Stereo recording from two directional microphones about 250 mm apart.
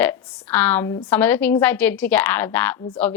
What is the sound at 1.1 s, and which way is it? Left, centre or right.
A woman's voice, centre.